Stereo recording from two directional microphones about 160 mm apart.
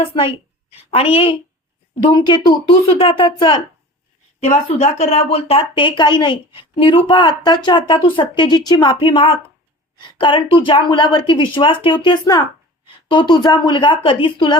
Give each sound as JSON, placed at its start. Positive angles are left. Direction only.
{"t": 0.0, "sound": "speech", "side_deg": 35}
{"t": 4.4, "sound": "a woman's voice", "side_deg": 45}